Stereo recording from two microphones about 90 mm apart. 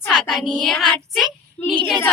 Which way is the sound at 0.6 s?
5° left (ahead or behind).